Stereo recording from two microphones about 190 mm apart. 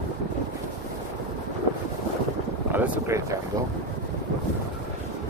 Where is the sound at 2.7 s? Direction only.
10° right (ahead or behind).